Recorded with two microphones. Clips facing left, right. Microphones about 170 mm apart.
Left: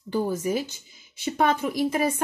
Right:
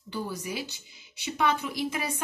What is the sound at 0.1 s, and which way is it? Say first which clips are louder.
A woman's voice: left 9 dB; 45° left (ahead or behind).